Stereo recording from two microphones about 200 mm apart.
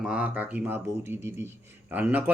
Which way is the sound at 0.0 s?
5° right (ahead or behind).